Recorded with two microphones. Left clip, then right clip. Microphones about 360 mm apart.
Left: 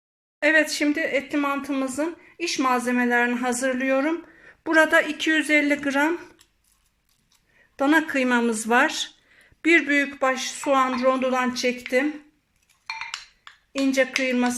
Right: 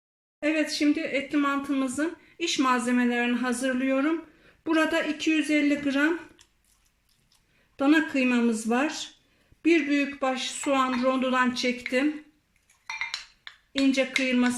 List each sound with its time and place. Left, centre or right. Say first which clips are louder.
0.4 s speech: left 6 dB; left
7.8 s speech: left 3 dB; centre
13.9 s speech: left 6 dB; centre